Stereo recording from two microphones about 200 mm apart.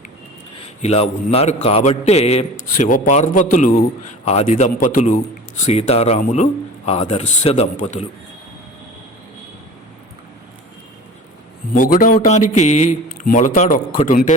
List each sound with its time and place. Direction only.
0.8 s a man's voice: 30° left (ahead or behind)
11.7 s a man's voice: 45° left (ahead or behind)